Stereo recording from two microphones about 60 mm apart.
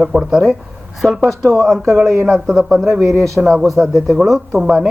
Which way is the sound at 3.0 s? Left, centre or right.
Right.